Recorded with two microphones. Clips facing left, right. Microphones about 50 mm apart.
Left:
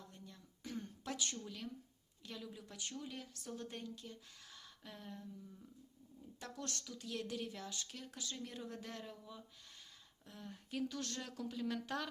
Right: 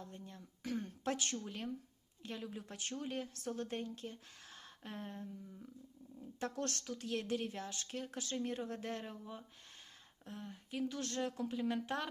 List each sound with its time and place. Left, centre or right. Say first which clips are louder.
0.0 s a sound: right 6 dB; right
1.4 s speech: right 4 dB; right
6.4 s speech: right 7 dB; right
10.4 s speech: even; centre
10.8 s speech: right 5 dB; right